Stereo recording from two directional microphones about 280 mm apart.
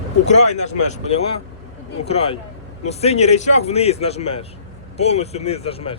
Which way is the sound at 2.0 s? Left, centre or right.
Left.